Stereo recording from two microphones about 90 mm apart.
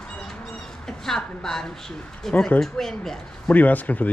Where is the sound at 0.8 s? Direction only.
5° left (ahead or behind).